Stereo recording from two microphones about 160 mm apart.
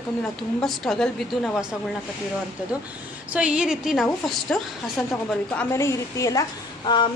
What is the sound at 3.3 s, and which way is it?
A woman's voice, 5° right (ahead or behind).